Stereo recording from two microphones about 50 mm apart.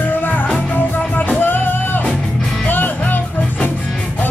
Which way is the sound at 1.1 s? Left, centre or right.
Left.